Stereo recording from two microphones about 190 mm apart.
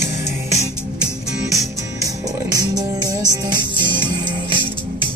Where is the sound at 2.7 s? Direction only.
20° right (ahead or behind).